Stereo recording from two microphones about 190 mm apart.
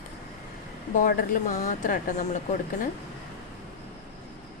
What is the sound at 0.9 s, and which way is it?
Speech, 45° left (ahead or behind).